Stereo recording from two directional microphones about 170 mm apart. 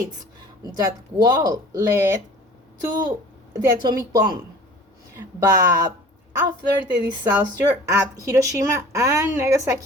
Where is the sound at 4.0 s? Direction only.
20° right (ahead or behind).